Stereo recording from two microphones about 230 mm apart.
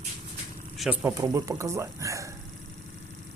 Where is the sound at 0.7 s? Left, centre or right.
Centre.